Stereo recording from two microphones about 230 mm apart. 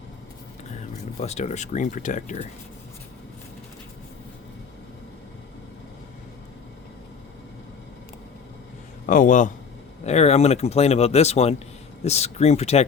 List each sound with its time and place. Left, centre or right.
1.2 s speech: left
9.0 s speech: left